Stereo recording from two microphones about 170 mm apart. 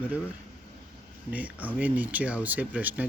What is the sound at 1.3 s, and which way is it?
Speech, 10° right (ahead or behind).